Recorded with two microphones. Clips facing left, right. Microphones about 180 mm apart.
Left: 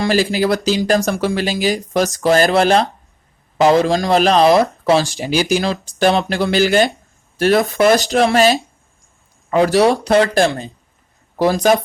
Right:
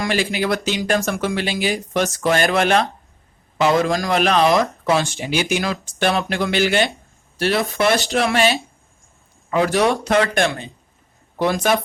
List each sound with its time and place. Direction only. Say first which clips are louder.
0.0 s speech: left 5 dB; 35° left (ahead or behind)